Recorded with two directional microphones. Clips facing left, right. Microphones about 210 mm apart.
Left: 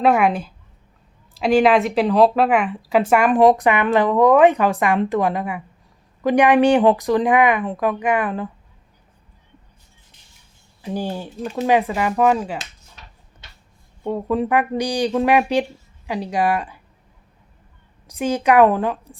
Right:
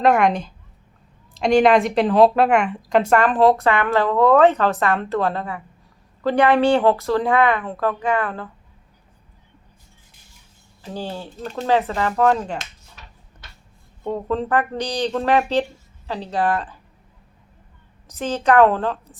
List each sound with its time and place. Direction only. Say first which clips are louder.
0.0 s speech: even; 5° left (ahead or behind)
10.8 s speech: left 4 dB; 15° left (ahead or behind)
14.0 s speech: left 2 dB; 10° left (ahead or behind)
18.1 s speech: left 1 dB; 10° left (ahead or behind)